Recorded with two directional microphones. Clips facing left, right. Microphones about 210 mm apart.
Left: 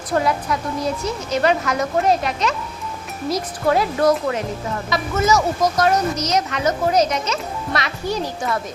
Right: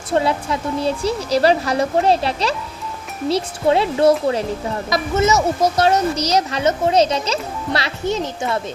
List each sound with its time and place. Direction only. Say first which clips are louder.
0.1 s speech: right 1 dB; 25° right (ahead or behind)